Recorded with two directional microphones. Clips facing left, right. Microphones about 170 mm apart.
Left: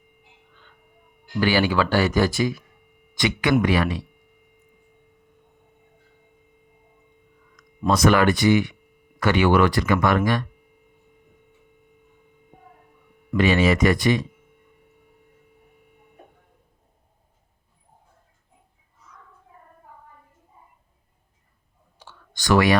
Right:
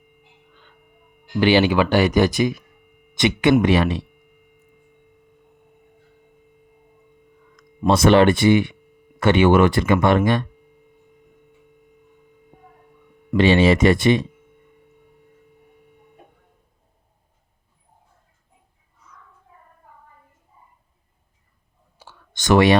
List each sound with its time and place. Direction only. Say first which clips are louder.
1.2 s speech: right 5 dB; 20° right (ahead or behind)
7.5 s speech: right 3 dB; 25° right (ahead or behind)
13.3 s speech: right 4 dB; 30° right (ahead or behind)
22.0 s clicking: right 1 dB; 10° right (ahead or behind)
22.4 s speech: right 3 dB; 20° right (ahead or behind)